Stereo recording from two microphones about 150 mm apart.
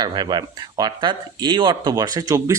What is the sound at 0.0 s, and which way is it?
Speech, 30° right (ahead or behind).